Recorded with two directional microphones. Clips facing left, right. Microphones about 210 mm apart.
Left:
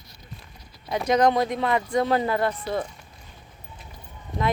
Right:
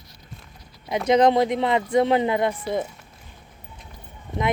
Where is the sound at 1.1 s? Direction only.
20° right (ahead or behind).